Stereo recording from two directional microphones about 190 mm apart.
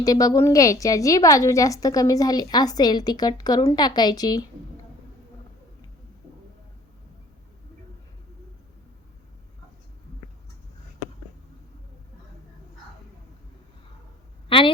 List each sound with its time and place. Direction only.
0.0 s a woman's voice: 20° left (ahead or behind)
14.5 s a woman's voice: 30° left (ahead or behind)